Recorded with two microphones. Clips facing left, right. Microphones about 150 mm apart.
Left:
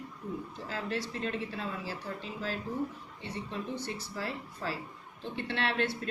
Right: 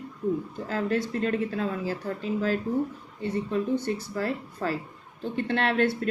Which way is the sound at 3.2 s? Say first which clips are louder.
Right 11 dB; 45° right (ahead or behind).